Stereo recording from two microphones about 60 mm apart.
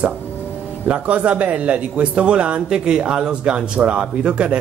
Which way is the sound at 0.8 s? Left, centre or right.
Right.